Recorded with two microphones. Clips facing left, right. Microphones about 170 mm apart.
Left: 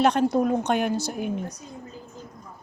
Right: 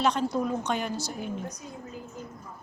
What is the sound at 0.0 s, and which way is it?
A woman's voice, 55° left (ahead or behind).